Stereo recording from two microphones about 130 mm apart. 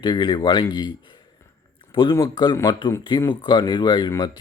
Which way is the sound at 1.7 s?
40° left (ahead or behind).